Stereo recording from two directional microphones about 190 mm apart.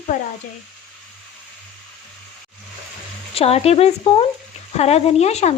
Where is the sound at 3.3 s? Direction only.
30° left (ahead or behind).